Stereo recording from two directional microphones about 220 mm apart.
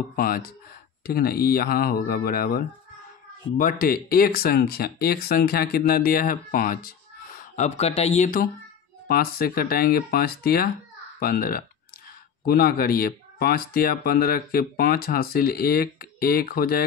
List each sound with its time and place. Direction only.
0.1 s a child's voice: 40° left (ahead or behind)